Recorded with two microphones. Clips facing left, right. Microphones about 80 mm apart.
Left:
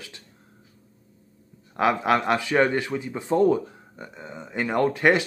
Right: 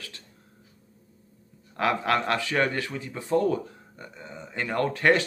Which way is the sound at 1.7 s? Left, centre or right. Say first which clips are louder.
Left 3 dB; centre.